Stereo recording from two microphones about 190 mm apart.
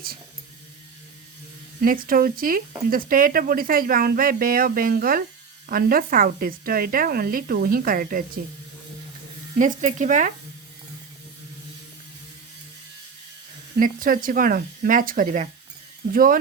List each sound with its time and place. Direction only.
1.8 s speech: 50° right (ahead or behind)
9.6 s speech: 40° right (ahead or behind)
13.7 s speech: 45° right (ahead or behind)